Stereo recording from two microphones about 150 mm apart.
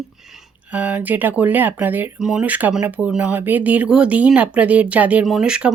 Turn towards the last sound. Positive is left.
turn(degrees=-5)  # may be behind; listen again after turning